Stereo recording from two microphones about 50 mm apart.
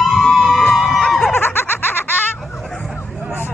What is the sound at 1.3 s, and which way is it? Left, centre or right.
Snicker, left.